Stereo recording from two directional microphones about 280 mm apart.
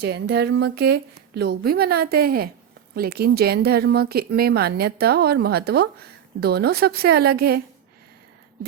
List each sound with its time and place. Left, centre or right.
0.0 s speech: right